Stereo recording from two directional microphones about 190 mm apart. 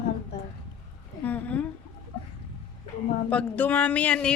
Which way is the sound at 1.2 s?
10° left (ahead or behind).